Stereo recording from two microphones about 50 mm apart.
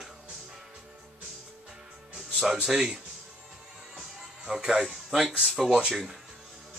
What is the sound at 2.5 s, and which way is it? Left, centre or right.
Speech, centre.